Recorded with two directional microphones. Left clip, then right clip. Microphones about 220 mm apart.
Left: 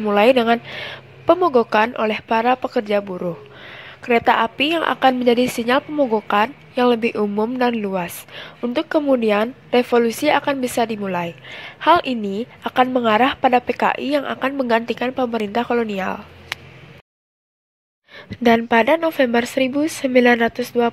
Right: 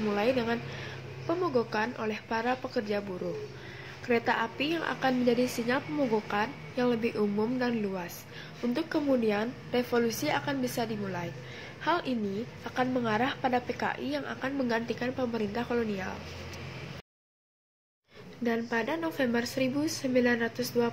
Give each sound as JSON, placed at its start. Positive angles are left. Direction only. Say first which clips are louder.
{"t": 0.1, "sound": "a woman's voice", "louder": "left 16 dB", "side_deg": 40}
{"t": 18.4, "sound": "a woman's voice", "louder": "left 16 dB", "side_deg": 45}